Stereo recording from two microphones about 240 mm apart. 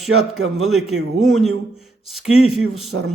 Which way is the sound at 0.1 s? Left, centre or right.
Right.